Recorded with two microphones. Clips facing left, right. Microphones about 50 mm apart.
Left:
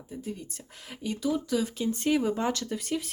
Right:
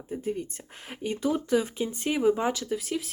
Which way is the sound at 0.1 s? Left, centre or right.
Right.